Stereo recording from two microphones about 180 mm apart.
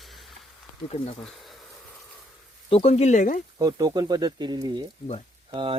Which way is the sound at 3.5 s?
20° right (ahead or behind).